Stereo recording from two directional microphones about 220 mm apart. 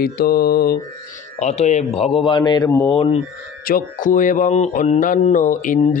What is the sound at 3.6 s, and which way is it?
Speech, 40° left (ahead or behind).